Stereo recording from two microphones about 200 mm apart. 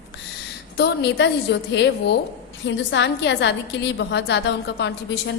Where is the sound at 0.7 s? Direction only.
55° left (ahead or behind).